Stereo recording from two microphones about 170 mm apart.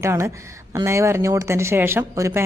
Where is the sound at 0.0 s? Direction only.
15° right (ahead or behind).